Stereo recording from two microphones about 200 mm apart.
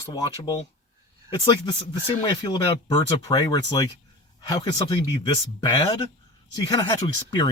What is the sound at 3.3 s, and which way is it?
Speech, 20° left (ahead or behind).